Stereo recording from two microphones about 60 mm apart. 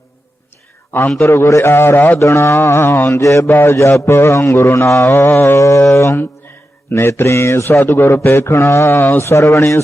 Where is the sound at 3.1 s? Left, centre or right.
Left.